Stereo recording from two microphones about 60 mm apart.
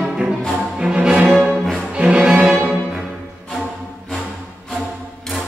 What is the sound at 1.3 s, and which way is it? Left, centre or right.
Music, centre.